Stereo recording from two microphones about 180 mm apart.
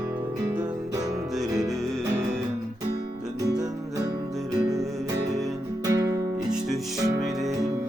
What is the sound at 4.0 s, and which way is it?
Music, 20° right (ahead or behind).